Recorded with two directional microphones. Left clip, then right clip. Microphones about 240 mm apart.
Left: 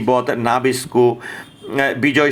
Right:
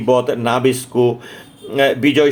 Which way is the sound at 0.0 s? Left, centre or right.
Centre.